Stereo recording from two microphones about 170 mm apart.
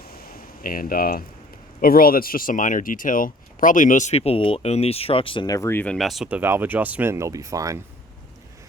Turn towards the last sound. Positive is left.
turn(degrees=-20)  # may be behind; listen again after turning